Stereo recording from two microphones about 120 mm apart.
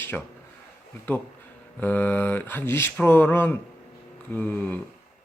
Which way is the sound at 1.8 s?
15° left (ahead or behind).